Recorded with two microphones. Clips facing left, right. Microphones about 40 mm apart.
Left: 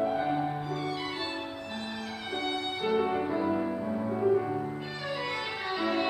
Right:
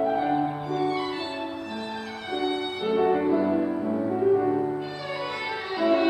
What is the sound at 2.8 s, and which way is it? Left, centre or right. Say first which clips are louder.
Music: right 6 dB; centre.